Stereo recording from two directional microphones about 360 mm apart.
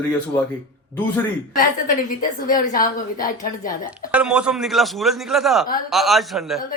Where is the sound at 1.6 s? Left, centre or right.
Left.